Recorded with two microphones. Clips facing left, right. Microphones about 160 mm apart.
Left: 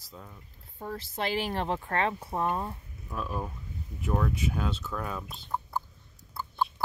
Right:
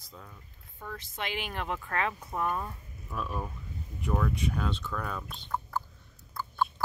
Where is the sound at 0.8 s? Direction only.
35° left (ahead or behind).